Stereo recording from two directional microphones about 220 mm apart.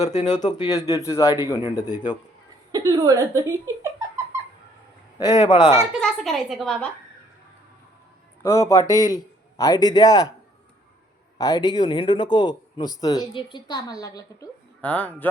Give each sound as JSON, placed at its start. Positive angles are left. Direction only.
{"t": 0.0, "sound": "a man's voice", "side_deg": 30}
{"t": 0.4, "sound": "a man's voice", "side_deg": 15}
{"t": 2.7, "sound": "a woman's voice", "side_deg": -15}
{"t": 5.2, "sound": "a man's voice", "side_deg": 20}
{"t": 5.9, "sound": "a woman's voice", "side_deg": 0}
{"t": 8.4, "sound": "a man's voice", "side_deg": 15}
{"t": 11.3, "sound": "a man's voice", "side_deg": 15}